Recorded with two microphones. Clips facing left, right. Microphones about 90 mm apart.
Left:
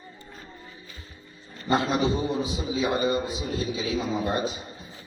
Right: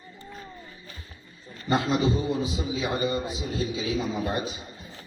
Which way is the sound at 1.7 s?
25° left (ahead or behind).